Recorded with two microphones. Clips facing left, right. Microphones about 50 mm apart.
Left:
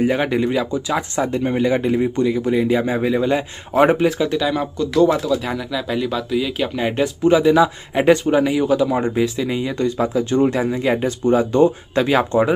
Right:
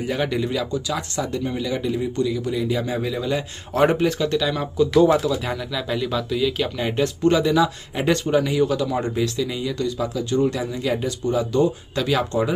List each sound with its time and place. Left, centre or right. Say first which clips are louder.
0.1 s speech: left 5 dB; left
3.7 s speech: left 4 dB; centre
4.7 s speech: right 1 dB; centre; by 12.5 s left